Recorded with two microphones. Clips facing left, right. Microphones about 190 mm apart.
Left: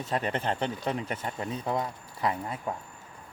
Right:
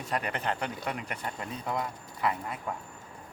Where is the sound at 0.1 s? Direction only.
30° left (ahead or behind).